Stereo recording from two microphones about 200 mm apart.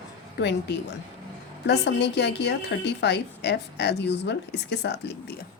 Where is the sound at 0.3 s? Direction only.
60° left (ahead or behind).